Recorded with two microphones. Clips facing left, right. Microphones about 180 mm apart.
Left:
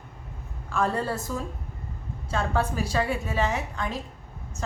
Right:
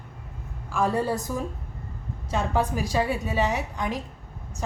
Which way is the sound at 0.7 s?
10° right (ahead or behind).